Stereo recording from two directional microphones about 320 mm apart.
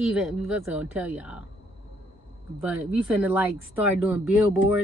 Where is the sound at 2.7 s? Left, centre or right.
Centre.